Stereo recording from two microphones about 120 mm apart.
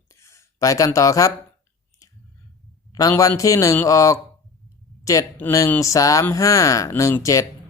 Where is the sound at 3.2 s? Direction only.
30° left (ahead or behind).